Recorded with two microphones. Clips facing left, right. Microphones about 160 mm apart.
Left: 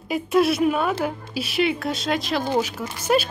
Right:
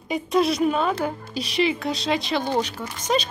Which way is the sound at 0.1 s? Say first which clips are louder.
Left 2 dB; 5° left (ahead or behind).